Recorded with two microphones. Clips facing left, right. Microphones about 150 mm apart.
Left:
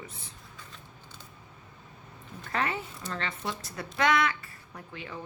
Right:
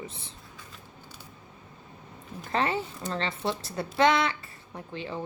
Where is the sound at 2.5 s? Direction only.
30° right (ahead or behind).